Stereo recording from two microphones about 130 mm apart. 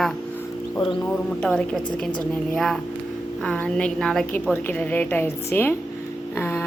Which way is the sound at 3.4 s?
10° left (ahead or behind).